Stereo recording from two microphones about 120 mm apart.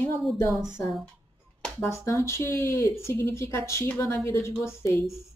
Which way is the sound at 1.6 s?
10° left (ahead or behind).